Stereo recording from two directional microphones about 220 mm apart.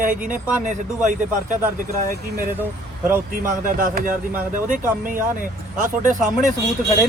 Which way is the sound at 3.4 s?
35° right (ahead or behind).